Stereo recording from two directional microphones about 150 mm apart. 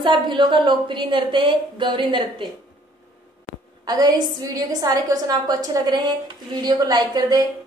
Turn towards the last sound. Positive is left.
turn(degrees=-25)  # may be behind; listen again after turning